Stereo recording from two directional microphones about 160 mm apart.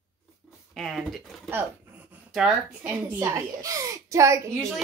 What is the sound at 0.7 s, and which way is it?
Speech, centre (ahead or behind).